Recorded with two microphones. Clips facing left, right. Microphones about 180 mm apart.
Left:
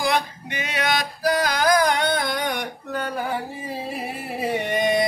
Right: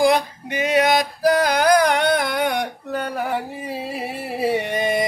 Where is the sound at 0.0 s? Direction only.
45° right (ahead or behind).